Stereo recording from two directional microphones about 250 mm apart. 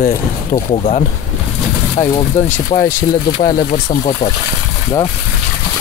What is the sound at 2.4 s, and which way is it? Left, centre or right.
Speech, left.